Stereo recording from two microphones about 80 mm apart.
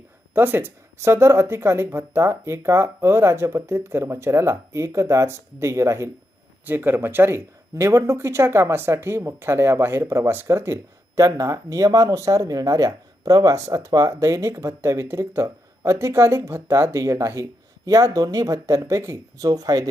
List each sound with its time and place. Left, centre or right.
0.3 s speech: right
6.7 s speech: right